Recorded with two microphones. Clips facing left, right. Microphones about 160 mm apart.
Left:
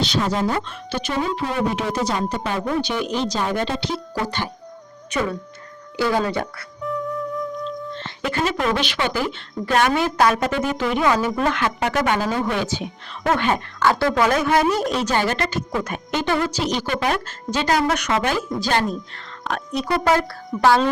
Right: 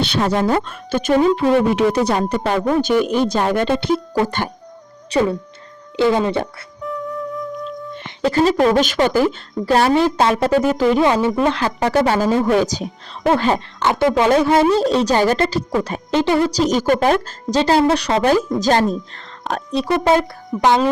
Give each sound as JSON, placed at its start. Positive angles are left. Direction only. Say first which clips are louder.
{"t": 0.0, "sound": "speech", "louder": "right 4 dB", "side_deg": -65}
{"t": 1.7, "sound": "speech", "louder": "right 7 dB", "side_deg": -65}
{"t": 5.1, "sound": "a woman's voice", "louder": "right 7 dB", "side_deg": -35}
{"t": 6.0, "sound": "a woman's voice", "louder": "right 5 dB", "side_deg": -20}
{"t": 6.8, "sound": "music", "louder": "even", "side_deg": 0}
{"t": 8.2, "sound": "a woman's voice", "louder": "right 8 dB", "side_deg": -35}
{"t": 11.0, "sound": "a woman's voice", "louder": "right 4 dB", "side_deg": -25}